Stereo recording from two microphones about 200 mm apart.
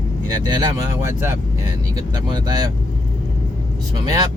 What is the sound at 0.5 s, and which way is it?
Speech, 20° right (ahead or behind).